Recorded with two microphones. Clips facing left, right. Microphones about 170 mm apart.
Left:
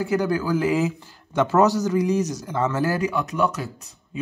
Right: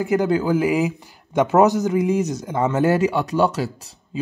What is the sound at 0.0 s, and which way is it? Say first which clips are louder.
Speech: right 3 dB; 20° right (ahead or behind).